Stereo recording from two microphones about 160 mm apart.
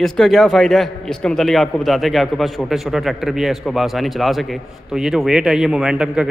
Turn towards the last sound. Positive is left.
turn(degrees=-5)  # may be behind; listen again after turning